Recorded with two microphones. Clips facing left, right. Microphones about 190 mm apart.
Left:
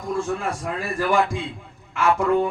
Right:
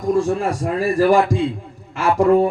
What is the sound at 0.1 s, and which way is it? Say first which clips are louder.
Speech: right 7 dB; 35° right (ahead or behind).